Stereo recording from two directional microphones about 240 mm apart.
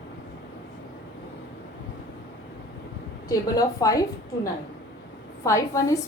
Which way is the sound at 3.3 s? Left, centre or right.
Centre.